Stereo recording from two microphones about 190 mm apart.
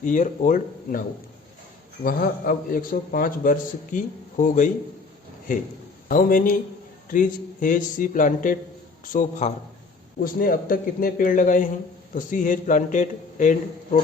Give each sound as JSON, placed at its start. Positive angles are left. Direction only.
{"t": 0.0, "sound": "a man's voice", "side_deg": 45}
{"t": 2.0, "sound": "a man's voice", "side_deg": 50}
{"t": 6.1, "sound": "a man's voice", "side_deg": 45}
{"t": 10.2, "sound": "a man's voice", "side_deg": 50}